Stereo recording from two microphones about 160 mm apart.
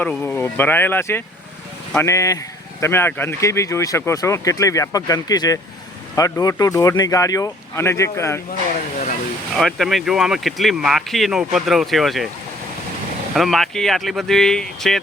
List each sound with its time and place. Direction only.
0.1 s speech: 10° left (ahead or behind)
9.6 s speech: centre (ahead or behind)
13.3 s speech: centre (ahead or behind)